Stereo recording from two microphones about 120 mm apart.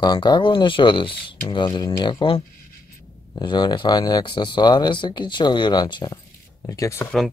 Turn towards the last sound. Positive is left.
turn(degrees=25)  # may be behind; listen again after turning